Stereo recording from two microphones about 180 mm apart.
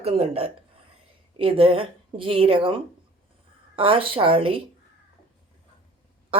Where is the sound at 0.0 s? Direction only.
35° right (ahead or behind).